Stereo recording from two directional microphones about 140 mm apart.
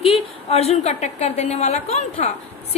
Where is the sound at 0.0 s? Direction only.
45° left (ahead or behind).